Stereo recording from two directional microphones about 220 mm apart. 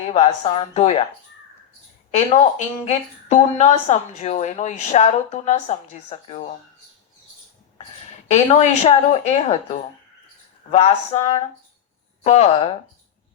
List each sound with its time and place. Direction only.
0.1 s a woman's voice: 30° left (ahead or behind)
2.0 s a woman's voice: 30° left (ahead or behind)
8.3 s a woman's voice: 30° left (ahead or behind)
10.7 s a woman's voice: 30° left (ahead or behind)
12.2 s speech: 30° left (ahead or behind)